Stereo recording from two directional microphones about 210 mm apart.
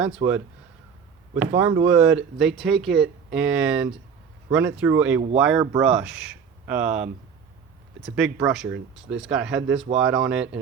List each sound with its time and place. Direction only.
0.2 s speech: 25° right (ahead or behind)
1.4 s speech: 10° right (ahead or behind)
8.1 s speech: 5° right (ahead or behind)